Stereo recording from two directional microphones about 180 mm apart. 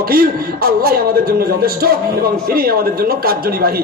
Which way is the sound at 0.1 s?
55° right (ahead or behind).